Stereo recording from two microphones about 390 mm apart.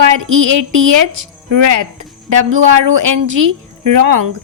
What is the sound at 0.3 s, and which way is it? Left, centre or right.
Speech, right.